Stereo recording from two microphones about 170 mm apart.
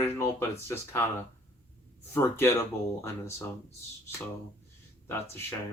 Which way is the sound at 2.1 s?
15° left (ahead or behind).